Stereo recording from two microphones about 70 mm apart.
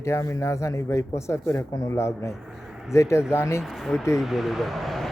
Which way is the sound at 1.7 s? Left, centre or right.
Left.